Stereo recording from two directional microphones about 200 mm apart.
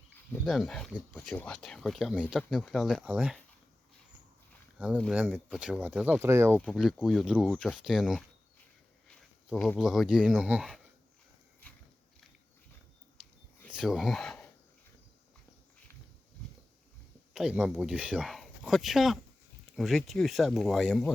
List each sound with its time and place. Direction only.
0.4 s speech: centre (ahead or behind)
4.9 s speech: centre (ahead or behind)
6.6 s speech: centre (ahead or behind)
13.7 s speech: centre (ahead or behind)
17.3 s speech: 5° right (ahead or behind)